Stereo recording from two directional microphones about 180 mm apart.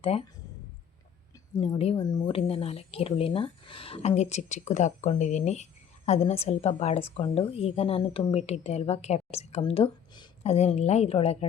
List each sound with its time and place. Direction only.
0.0 s a woman's voice: 35° left (ahead or behind)
1.6 s a woman's voice: 30° left (ahead or behind)